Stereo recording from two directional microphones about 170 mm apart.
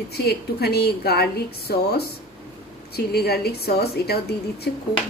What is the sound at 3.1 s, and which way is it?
Speech, 70° left (ahead or behind).